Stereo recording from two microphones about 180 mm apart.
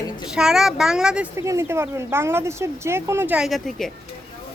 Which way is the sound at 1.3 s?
15° right (ahead or behind).